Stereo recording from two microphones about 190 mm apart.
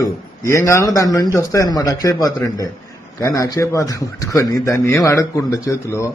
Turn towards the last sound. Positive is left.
turn(degrees=15)  # may be behind; listen again after turning